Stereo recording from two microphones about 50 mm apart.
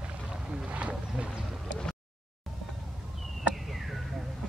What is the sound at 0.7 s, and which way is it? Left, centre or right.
Wild animals, right.